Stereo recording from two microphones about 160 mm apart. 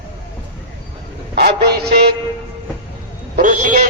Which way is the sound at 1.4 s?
80° right.